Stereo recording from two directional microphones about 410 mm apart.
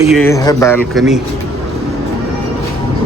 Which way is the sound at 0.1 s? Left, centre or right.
Centre.